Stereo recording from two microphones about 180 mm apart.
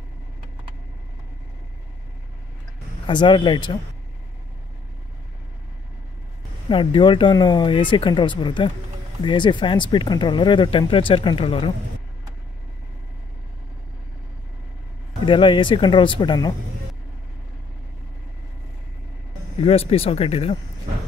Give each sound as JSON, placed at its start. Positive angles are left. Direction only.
{"t": 3.1, "sound": "speech", "side_deg": 25}
{"t": 6.7, "sound": "speech", "side_deg": 30}
{"t": 15.2, "sound": "speech", "side_deg": 25}
{"t": 19.6, "sound": "speech", "side_deg": 35}